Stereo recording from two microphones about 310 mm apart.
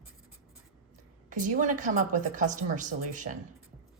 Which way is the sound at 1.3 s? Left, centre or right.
Right.